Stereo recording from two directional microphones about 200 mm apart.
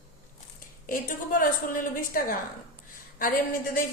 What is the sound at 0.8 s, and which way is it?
A woman's voice, 45° left (ahead or behind).